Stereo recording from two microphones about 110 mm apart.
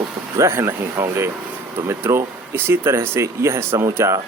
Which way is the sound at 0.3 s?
25° right (ahead or behind).